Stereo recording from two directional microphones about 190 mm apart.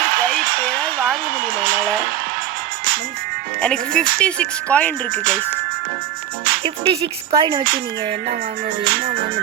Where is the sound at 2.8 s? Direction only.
50° right (ahead or behind).